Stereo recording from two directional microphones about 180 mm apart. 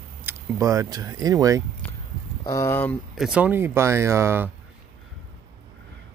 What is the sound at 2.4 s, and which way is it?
Speech, 15° left (ahead or behind).